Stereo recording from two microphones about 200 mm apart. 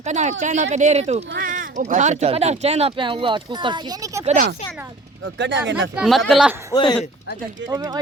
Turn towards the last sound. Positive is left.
turn(degrees=-20)  # may be behind; listen again after turning